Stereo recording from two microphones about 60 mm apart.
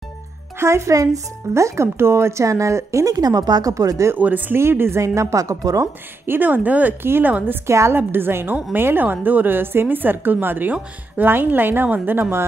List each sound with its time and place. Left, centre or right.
0.6 s speech: right
1.5 s speech: right
4.2 s speech: right
4.6 s a woman's voice: right
5.0 s a woman's voice: right
6.2 s speech: right
7.1 s a woman's voice: right
7.6 s a woman's voice: right
7.9 s a woman's voice: right